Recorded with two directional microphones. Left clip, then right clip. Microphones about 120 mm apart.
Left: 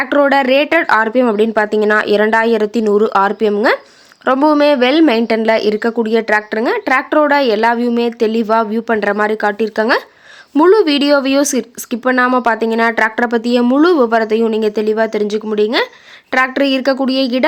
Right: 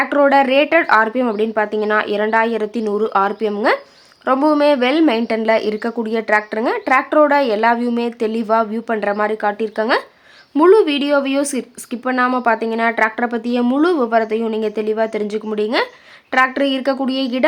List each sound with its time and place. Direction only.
0.0 s a woman's voice: 35° left (ahead or behind)